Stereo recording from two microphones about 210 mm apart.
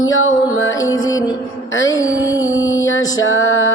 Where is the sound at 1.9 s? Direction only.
15° left (ahead or behind).